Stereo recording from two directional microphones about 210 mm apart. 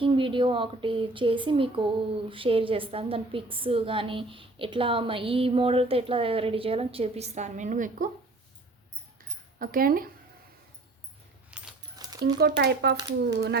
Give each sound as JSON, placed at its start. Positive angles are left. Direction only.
{"t": 0.0, "sound": "speech", "side_deg": -25}
{"t": 9.6, "sound": "speech", "side_deg": -45}
{"t": 11.5, "sound": "keys jangling", "side_deg": -5}
{"t": 11.9, "sound": "a sound", "side_deg": -20}
{"t": 12.4, "sound": "speech", "side_deg": -50}